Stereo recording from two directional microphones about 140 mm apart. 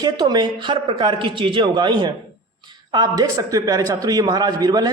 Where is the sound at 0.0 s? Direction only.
30° right (ahead or behind).